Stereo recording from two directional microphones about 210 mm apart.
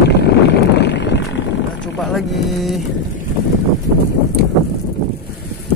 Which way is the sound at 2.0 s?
Centre (ahead or behind).